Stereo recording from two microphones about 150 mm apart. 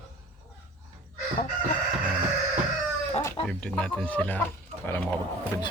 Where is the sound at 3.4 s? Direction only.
5° left (ahead or behind).